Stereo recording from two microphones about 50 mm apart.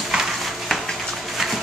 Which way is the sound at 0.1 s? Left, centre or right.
Centre.